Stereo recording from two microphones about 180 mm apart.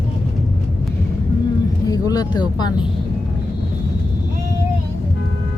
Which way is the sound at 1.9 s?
20° left (ahead or behind).